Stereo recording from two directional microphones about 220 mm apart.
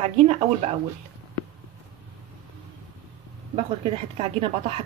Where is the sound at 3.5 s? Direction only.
30° right (ahead or behind).